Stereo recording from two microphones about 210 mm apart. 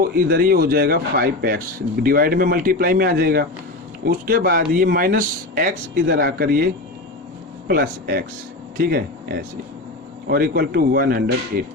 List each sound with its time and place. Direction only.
0.0 s speech: 45° right (ahead or behind)
7.7 s speech: 45° right (ahead or behind)